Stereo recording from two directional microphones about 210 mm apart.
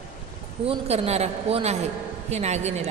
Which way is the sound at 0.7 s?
30° right (ahead or behind).